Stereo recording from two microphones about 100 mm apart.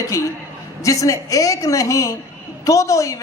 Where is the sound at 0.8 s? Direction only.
35° left (ahead or behind).